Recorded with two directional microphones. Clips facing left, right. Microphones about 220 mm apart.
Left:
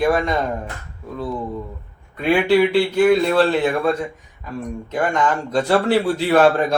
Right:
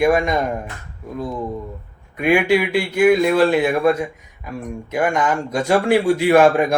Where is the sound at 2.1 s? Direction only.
10° right (ahead or behind).